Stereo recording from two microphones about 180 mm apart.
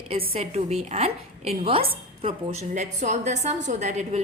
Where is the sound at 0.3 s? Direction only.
35° right (ahead or behind).